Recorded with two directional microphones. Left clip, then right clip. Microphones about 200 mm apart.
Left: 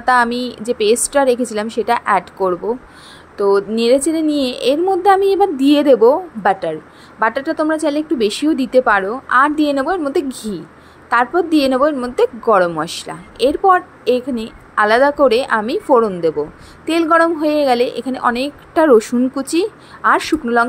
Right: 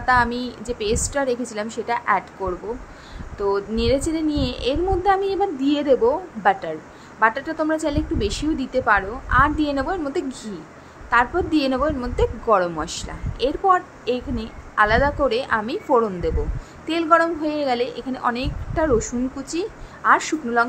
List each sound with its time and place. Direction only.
0.0 s a woman's voice: 30° left (ahead or behind)